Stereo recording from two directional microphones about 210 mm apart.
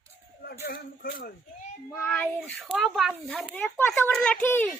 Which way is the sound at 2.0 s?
5° left (ahead or behind).